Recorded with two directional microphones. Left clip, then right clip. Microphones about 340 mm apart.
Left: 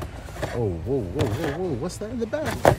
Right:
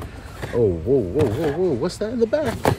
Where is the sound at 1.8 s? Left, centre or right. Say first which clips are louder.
Right 8 dB; centre.